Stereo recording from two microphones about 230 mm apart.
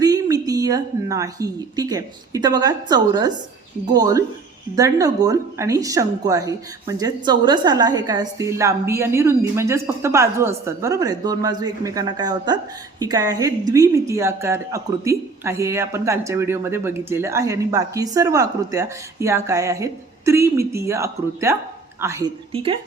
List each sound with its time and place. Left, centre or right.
0.0 s a woman's voice: centre
22.5 s speech: right